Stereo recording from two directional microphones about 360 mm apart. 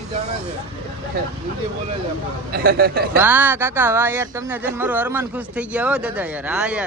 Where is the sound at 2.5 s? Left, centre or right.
Right.